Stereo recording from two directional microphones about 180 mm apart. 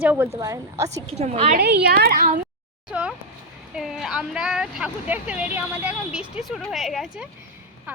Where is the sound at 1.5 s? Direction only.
60° right (ahead or behind).